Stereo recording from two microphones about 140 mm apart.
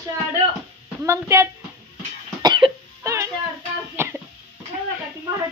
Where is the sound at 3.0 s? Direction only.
20° right (ahead or behind).